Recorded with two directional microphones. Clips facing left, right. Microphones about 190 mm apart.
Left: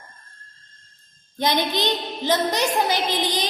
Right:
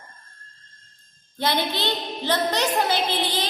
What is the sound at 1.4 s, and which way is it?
A woman's voice, 15° left (ahead or behind).